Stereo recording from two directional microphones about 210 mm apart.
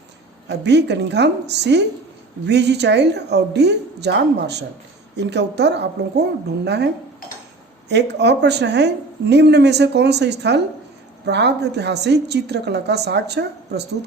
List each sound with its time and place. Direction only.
0.4 s a woman's voice: 55° right (ahead or behind)